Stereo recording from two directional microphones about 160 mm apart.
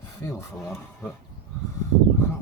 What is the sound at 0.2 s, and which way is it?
Speech, 20° left (ahead or behind).